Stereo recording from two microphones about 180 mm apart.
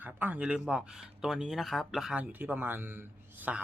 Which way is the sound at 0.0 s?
10° right (ahead or behind).